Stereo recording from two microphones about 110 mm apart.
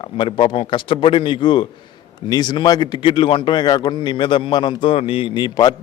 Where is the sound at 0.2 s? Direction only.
45° left (ahead or behind).